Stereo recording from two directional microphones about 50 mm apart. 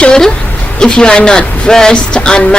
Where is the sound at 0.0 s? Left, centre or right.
Centre.